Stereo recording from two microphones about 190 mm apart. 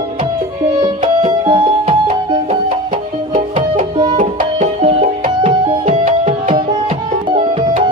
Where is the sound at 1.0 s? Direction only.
25° right (ahead or behind).